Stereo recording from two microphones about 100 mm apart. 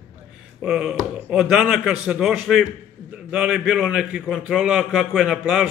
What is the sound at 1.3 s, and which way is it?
A man's voice, 5° right (ahead or behind).